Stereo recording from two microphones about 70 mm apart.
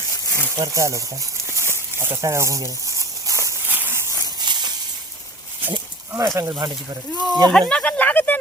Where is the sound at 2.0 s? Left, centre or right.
Right.